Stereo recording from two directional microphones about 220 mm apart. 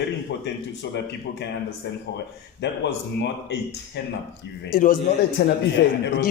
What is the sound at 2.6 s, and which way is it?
Speech, 50° left (ahead or behind).